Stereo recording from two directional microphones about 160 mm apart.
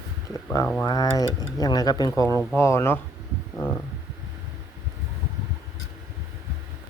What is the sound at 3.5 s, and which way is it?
Stomach rumble, 20° left (ahead or behind).